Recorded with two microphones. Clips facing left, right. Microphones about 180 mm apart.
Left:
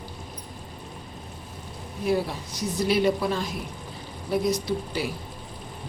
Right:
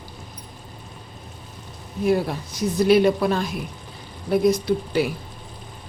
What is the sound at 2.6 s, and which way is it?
A woman's voice, 55° right (ahead or behind).